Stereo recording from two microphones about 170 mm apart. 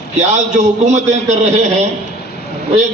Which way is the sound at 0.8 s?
45° right (ahead or behind).